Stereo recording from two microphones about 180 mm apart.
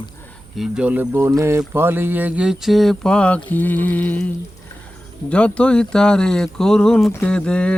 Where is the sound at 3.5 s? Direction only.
10° left (ahead or behind).